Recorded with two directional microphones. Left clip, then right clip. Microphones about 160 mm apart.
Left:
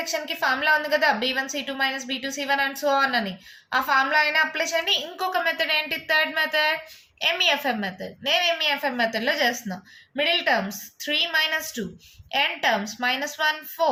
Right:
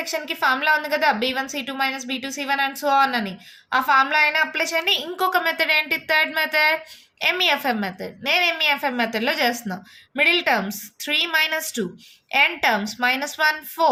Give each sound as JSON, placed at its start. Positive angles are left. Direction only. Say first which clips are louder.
{"t": 0.0, "sound": "a woman's voice", "louder": "right 3 dB", "side_deg": -35}